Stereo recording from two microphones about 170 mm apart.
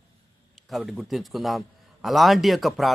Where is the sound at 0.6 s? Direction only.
Centre (ahead or behind).